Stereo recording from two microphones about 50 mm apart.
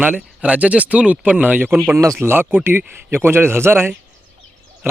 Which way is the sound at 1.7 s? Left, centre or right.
Right.